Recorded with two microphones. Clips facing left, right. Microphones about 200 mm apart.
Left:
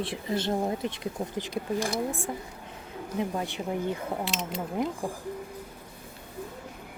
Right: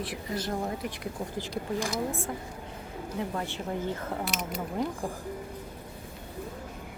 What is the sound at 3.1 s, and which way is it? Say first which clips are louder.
Speech: left 3 dB; 15° left (ahead or behind).